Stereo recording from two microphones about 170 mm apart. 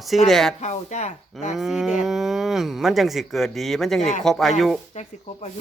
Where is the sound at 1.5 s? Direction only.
Centre (ahead or behind).